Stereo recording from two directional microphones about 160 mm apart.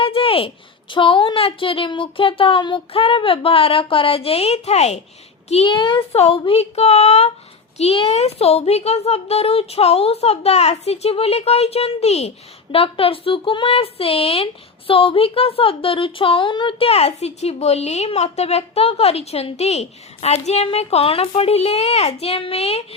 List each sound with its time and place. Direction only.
0.0 s speech: 35° left (ahead or behind)